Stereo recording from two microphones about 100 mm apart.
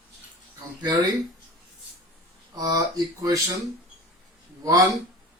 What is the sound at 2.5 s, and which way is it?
Speech, 40° right (ahead or behind).